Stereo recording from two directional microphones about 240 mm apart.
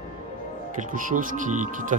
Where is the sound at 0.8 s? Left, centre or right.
Right.